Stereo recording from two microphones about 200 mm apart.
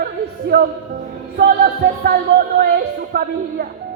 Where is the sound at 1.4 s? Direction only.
50° right (ahead or behind).